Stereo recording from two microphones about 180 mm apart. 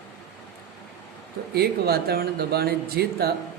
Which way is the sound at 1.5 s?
60° right (ahead or behind).